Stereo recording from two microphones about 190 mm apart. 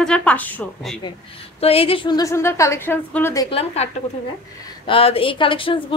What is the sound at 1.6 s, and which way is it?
A woman's voice, 30° left (ahead or behind).